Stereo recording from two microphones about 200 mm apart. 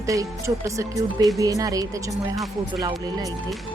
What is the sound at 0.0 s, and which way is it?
Speech, 15° right (ahead or behind).